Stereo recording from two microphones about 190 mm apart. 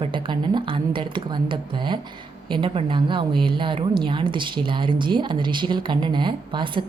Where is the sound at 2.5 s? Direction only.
25° right (ahead or behind).